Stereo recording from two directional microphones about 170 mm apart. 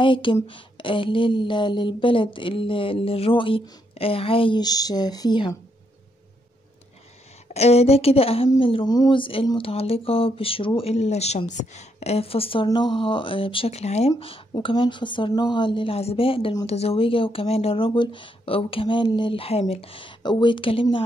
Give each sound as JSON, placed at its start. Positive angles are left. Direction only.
{"t": 0.0, "sound": "speech", "side_deg": 30}
{"t": 7.4, "sound": "speech", "side_deg": 40}